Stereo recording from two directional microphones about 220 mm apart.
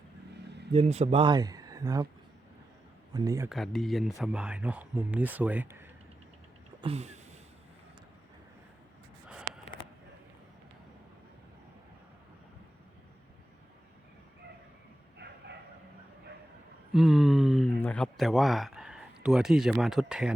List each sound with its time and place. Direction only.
0.7 s speech: 30° right (ahead or behind)
3.1 s speech: 15° right (ahead or behind)
3.5 s speech: centre (ahead or behind)
6.8 s a sound: 30° right (ahead or behind)
15.2 s bow-wow: 50° right (ahead or behind)
16.9 s speech: centre (ahead or behind)